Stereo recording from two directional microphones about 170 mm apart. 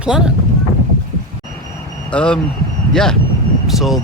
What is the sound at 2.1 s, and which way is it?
Speech, 5° left (ahead or behind).